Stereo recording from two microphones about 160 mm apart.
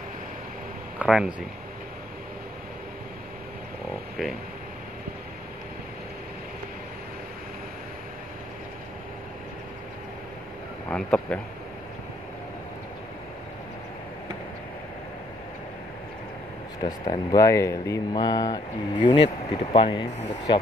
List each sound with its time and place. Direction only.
0.9 s speech: 5° right (ahead or behind)
10.9 s a sound: 5° left (ahead or behind)
16.8 s speech: 25° left (ahead or behind)